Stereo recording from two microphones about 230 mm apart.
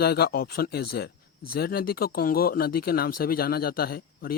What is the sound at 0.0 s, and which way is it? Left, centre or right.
Speech, left.